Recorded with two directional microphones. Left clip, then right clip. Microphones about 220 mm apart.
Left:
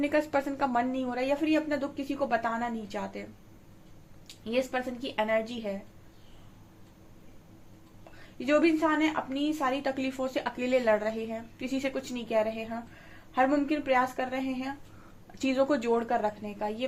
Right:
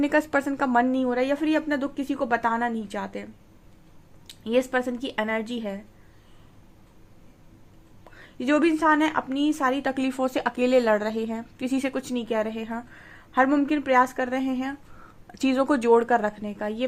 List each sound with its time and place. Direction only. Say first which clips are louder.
0.0 s a woman's voice: right 5 dB; 45° right (ahead or behind)
4.3 s a woman's voice: right 6 dB; 45° right (ahead or behind)
8.4 s a woman's voice: right 3 dB; 45° right (ahead or behind)